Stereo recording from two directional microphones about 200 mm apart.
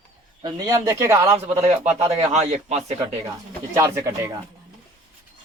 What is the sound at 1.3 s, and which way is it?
A man's voice, 30° right (ahead or behind).